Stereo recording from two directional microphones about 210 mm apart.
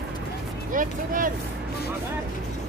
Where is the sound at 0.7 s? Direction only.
40° right (ahead or behind).